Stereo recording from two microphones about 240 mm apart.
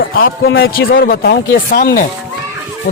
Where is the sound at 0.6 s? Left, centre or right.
Left.